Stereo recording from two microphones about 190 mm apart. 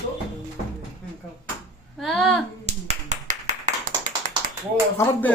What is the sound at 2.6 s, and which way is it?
Clapping, 35° right (ahead or behind).